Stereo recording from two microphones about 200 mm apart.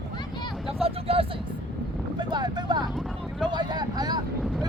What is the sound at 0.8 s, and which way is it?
Vehicle, 30° right (ahead or behind).